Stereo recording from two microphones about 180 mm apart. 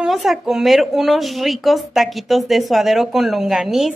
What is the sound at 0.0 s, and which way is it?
Speech, centre (ahead or behind).